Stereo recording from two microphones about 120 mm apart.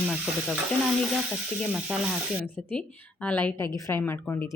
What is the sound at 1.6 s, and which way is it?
Sizzle, 10° right (ahead or behind).